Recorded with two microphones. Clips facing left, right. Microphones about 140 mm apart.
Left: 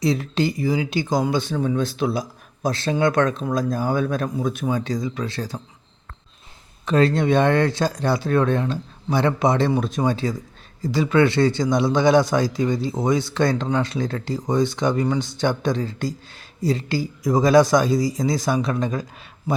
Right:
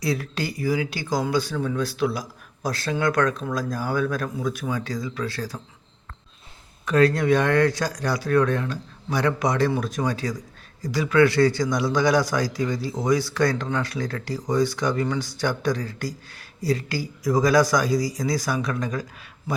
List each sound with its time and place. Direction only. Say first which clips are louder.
0.0 s speech: left 5 dB; 20° left (ahead or behind)
6.8 s speech: left 1 dB; 25° left (ahead or behind)